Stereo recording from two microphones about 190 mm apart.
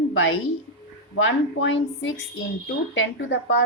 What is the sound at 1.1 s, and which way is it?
A woman's voice, 80° left.